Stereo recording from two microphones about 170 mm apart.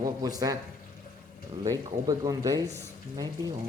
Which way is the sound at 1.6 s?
20° right (ahead or behind).